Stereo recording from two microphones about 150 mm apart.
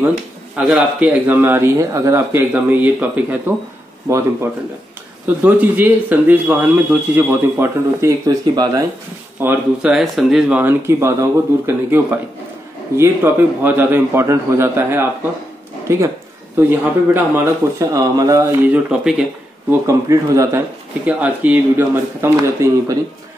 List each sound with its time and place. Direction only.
0.6 s speech: 5° right (ahead or behind)
5.2 s speech: 10° right (ahead or behind)
9.8 s speech: 5° right (ahead or behind); by 18.4 s 25° right (ahead or behind)
18.6 s speech: 10° right (ahead or behind)
19.7 s speech: 20° right (ahead or behind)
21.0 s speech: 10° right (ahead or behind)